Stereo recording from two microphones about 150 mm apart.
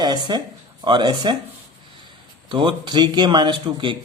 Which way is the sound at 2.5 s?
30° right (ahead or behind).